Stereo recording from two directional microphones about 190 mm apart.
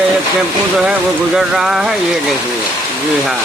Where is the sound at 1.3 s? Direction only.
Centre (ahead or behind).